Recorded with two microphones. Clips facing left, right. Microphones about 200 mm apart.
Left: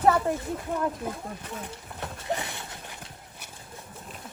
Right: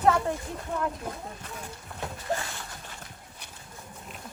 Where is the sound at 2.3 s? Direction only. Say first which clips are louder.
Left 1 dB; 20° left (ahead or behind).